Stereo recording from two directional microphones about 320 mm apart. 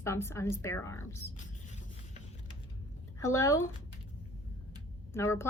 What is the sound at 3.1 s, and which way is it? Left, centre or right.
Speech, centre.